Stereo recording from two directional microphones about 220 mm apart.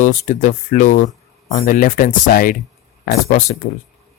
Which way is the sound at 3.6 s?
40° left (ahead or behind).